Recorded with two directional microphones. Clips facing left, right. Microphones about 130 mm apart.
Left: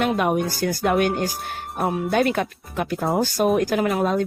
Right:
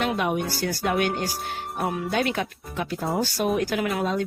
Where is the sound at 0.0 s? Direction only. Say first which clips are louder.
Left 4 dB; 45° left (ahead or behind).